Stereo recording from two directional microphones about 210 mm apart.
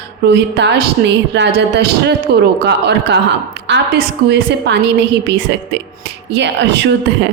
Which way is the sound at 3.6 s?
55° right (ahead or behind).